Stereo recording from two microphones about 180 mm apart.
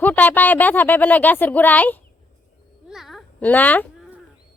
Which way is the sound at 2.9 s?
Centre (ahead or behind).